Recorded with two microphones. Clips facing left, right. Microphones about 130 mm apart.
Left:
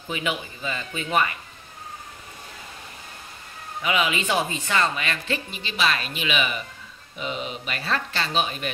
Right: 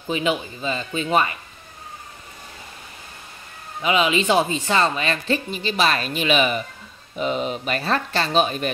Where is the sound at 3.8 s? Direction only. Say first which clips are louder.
Right 5 dB; 25° right (ahead or behind).